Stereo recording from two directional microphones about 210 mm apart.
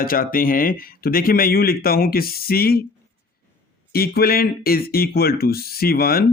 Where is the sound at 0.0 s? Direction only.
40° left (ahead or behind).